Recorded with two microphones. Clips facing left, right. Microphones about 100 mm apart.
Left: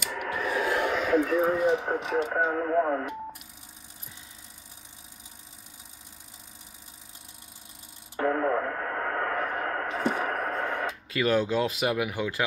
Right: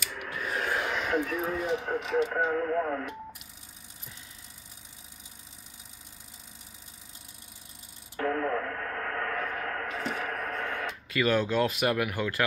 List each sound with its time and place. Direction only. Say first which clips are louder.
0.1 s a sound: left 6 dB; 90° left
1.4 s speech: left 6 dB; 35° left (ahead or behind)
2.3 s speech: left 3 dB; 15° left (ahead or behind)
8.2 s radio: left 3 dB; 25° left (ahead or behind)
11.1 s speech: left 1 dB; 25° left (ahead or behind)